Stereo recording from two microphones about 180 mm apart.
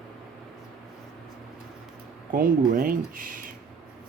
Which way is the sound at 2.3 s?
50° right (ahead or behind).